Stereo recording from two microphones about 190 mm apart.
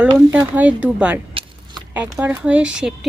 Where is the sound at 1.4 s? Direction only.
30° right (ahead or behind).